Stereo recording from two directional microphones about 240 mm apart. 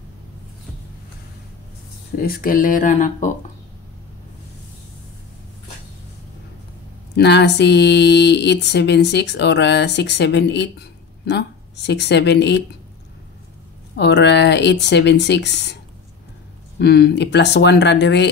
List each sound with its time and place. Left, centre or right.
2.1 s speech: left
7.2 s speech: left
13.9 s speech: left